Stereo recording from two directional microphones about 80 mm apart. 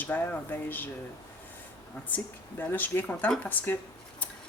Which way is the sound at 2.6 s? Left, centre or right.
Left.